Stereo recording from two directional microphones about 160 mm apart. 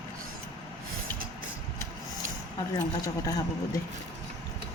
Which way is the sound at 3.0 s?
20° left (ahead or behind).